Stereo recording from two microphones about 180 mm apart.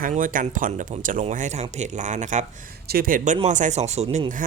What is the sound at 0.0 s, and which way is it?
Speech, 50° right (ahead or behind).